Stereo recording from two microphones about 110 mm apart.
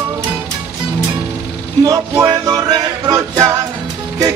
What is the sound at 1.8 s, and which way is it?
Music, 30° right (ahead or behind).